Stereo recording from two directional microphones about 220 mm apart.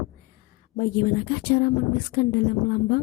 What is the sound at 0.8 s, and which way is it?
A woman's voice, 40° left (ahead or behind).